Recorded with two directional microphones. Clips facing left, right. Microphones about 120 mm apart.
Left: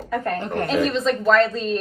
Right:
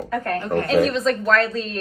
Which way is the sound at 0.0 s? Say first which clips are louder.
Even; centre (ahead or behind).